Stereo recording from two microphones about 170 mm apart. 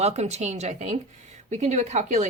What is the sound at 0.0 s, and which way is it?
Speech, 40° right (ahead or behind).